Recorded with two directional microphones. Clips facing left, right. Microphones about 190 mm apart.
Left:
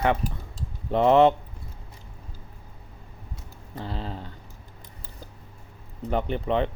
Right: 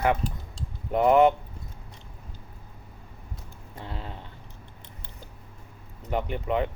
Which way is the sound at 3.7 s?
35° left (ahead or behind).